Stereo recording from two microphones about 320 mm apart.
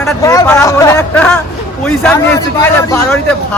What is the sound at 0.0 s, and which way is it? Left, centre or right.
Speech, centre.